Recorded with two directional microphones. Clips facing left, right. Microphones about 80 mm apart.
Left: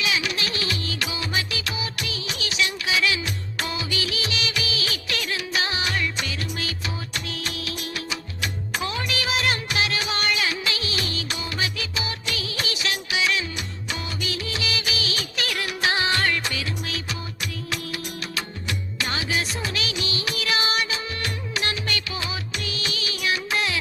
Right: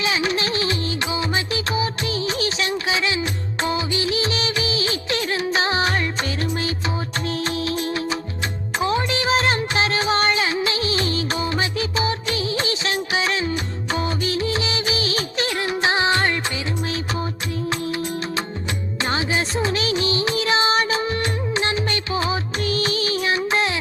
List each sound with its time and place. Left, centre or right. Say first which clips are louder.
0.0 s music: right 5 dB; right
1.5 s music of bollywood: right 7 dB; right
7.3 s music: right 8 dB; right
8.8 s music: right 8 dB; right
19.0 s music: right 5 dB; right